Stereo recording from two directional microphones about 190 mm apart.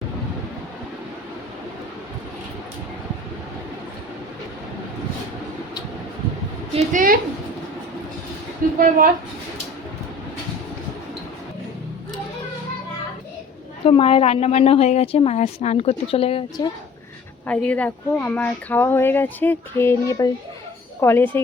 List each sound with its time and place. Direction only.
6.7 s a woman's voice: 45° right (ahead or behind)
8.6 s a sound: 45° right (ahead or behind)
13.8 s a woman's voice: 30° left (ahead or behind)
17.4 s speech: 5° left (ahead or behind)